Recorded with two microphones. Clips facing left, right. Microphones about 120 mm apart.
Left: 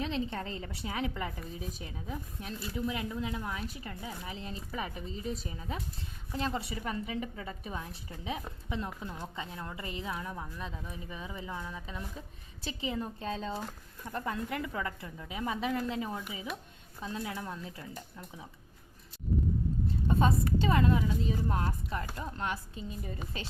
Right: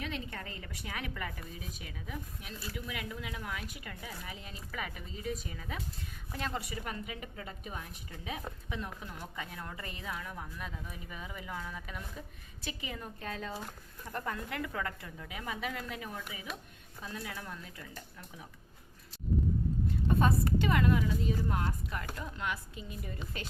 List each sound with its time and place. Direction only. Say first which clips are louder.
0.0 s speech: left 6 dB; 25° left (ahead or behind)
20.1 s speech: left 1 dB; 25° left (ahead or behind)